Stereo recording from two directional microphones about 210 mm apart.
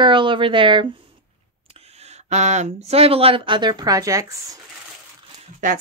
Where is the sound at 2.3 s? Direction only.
35° right (ahead or behind); by 4.3 s 15° right (ahead or behind).